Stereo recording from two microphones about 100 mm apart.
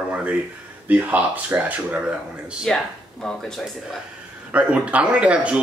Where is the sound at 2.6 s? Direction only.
5° left (ahead or behind).